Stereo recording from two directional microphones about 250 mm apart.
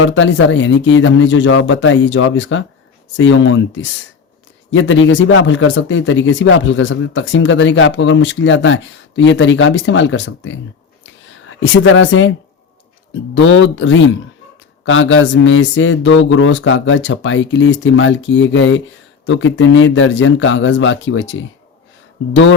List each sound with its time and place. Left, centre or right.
0.0 s speech: left
11.0 s a sound: left
13.3 s speech: left